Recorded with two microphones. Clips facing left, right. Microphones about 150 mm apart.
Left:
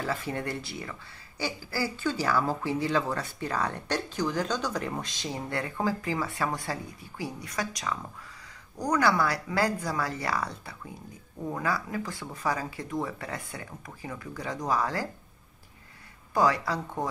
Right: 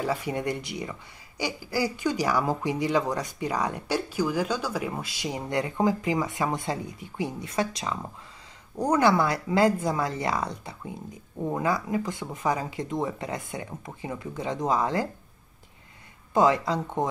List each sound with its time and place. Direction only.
0.0 s speech: 15° right (ahead or behind)
16.3 s speech: 20° right (ahead or behind)